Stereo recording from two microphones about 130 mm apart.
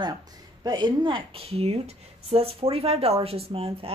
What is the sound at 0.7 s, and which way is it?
A woman's voice, 35° right (ahead or behind).